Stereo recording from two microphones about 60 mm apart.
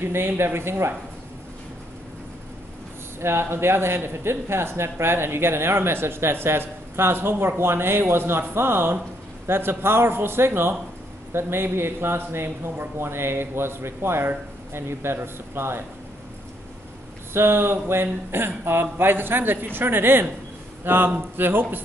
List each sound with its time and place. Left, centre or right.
0.0 s a man's voice: right
3.2 s a man's voice: right
17.3 s a man's voice: right